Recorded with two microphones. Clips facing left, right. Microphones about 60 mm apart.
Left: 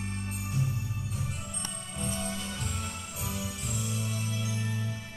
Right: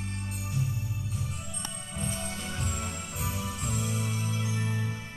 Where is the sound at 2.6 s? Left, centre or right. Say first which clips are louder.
Right 2 dB; right.